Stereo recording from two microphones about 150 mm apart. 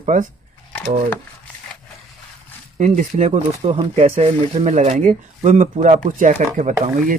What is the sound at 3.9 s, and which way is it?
Speech, 45° right (ahead or behind).